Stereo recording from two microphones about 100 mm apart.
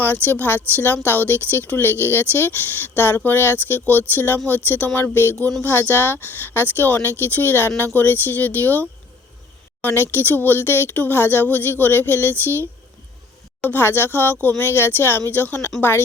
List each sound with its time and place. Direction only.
0.0 s speech: 20° left (ahead or behind)
13.6 s speech: 20° left (ahead or behind)